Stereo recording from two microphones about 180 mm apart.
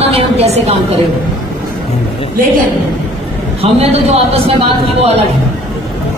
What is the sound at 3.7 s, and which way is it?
Speech, 35° right (ahead or behind).